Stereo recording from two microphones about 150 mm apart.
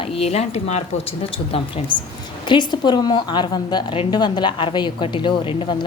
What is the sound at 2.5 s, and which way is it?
A woman's voice, 30° left (ahead or behind).